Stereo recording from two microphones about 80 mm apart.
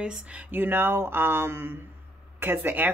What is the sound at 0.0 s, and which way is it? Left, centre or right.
Speech, centre.